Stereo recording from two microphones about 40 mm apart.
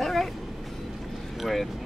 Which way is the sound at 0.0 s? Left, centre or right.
Centre.